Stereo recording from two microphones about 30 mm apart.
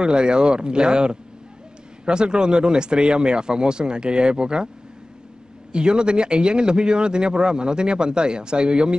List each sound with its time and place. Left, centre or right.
0.0 s a man's voice: right
5.7 s a man's voice: right